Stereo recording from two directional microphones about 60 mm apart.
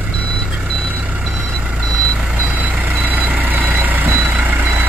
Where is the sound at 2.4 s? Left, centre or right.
Right.